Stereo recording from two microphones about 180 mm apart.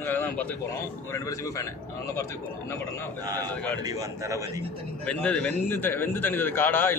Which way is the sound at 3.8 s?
20° right (ahead or behind).